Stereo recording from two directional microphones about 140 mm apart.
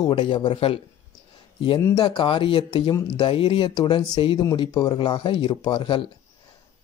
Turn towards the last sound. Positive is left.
turn(degrees=35)  # may be behind; listen again after turning